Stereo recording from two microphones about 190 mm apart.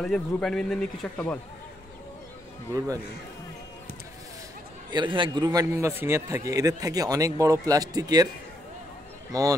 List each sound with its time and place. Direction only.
0.0 s a man's voice: 5° left (ahead or behind)
4.9 s a man's voice: 25° right (ahead or behind)
9.3 s speech: 20° right (ahead or behind)